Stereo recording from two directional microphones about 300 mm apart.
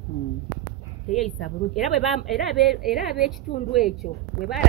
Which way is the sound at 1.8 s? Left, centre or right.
Centre.